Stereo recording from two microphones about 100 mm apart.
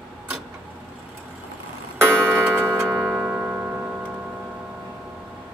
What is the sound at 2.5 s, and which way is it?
Tick-tock, 25° right (ahead or behind).